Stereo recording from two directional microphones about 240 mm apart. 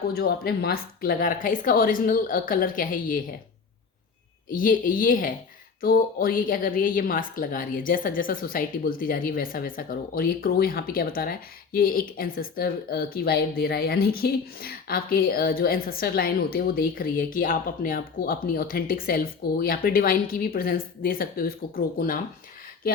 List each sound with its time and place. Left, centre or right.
0.1 s speech: left
4.5 s speech: left